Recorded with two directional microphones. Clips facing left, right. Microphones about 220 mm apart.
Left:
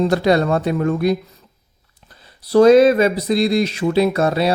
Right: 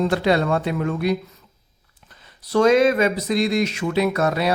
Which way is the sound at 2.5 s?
35° left (ahead or behind).